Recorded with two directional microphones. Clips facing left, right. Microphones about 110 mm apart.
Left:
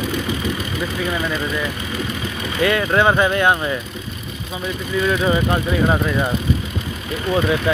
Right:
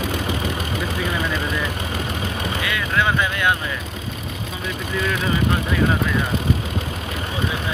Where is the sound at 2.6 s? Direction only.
40° left (ahead or behind).